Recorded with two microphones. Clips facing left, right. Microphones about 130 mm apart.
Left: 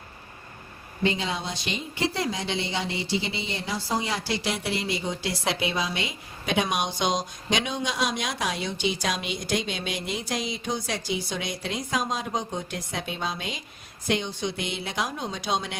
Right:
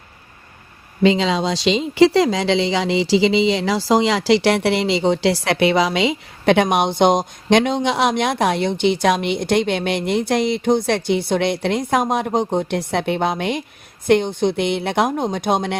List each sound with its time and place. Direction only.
1.0 s a woman's voice: 90° right; by 15.8 s 60° right (ahead or behind)